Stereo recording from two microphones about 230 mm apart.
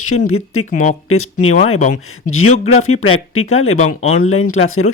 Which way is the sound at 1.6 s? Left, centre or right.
Left.